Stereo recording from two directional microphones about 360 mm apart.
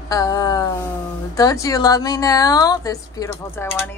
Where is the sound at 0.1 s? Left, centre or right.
Centre.